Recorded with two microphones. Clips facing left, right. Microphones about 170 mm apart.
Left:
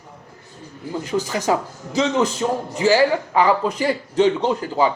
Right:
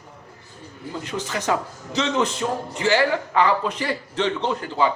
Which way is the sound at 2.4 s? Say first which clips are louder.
Left 4 dB; 20° left (ahead or behind).